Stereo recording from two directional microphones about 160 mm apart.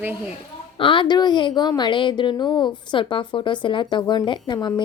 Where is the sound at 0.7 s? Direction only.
30° left (ahead or behind).